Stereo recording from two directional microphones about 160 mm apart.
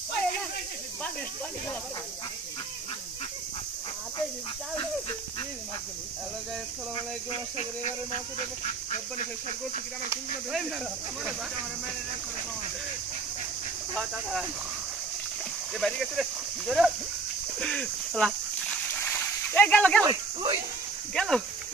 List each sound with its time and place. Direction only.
7.5 s speech: 40° left (ahead or behind)
13.9 s speech: centre (ahead or behind)
15.8 s speech: centre (ahead or behind)
17.6 s a sound: 5° left (ahead or behind)
20.1 s speech: 25° right (ahead or behind)
21.1 s speech: centre (ahead or behind)